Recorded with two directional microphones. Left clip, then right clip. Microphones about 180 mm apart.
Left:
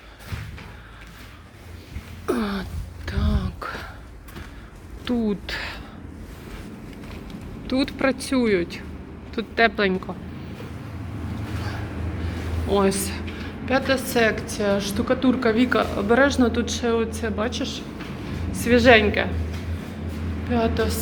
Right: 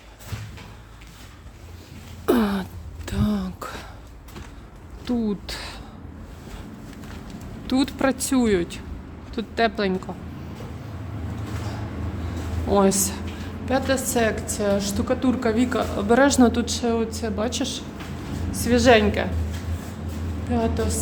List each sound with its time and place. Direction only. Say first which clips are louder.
2.2 s a sound: right 4 dB; 45° right (ahead or behind)
5.0 s speech: left 1 dB; 25° right (ahead or behind)
7.7 s speech: even; 40° right (ahead or behind)
9.3 s speech: left 3 dB; 25° right (ahead or behind)
12.7 s a woman's voice: right 2 dB; 35° right (ahead or behind); by 15.9 s 15° right (ahead or behind)
16.0 s speech: right 3 dB; 40° right (ahead or behind)
18.5 s speech: left 2 dB; 25° right (ahead or behind)
20.5 s a woman's voice: left 2 dB; 15° right (ahead or behind)